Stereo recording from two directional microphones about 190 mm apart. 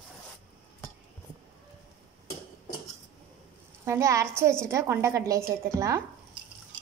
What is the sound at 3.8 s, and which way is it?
A woman's voice, 15° right (ahead or behind).